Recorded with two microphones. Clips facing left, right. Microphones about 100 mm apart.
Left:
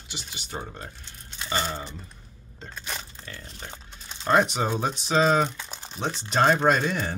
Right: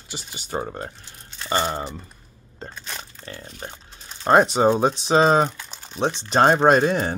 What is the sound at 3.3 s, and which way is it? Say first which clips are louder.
Speech: right 5 dB; 30° right (ahead or behind).